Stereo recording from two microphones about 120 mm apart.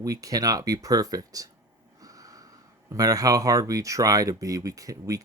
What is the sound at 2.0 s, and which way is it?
Snort, 30° right (ahead or behind).